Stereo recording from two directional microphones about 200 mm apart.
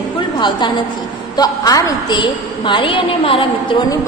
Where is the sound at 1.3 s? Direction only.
20° left (ahead or behind).